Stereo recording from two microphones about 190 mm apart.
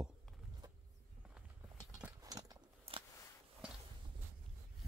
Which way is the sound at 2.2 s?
20° right (ahead or behind).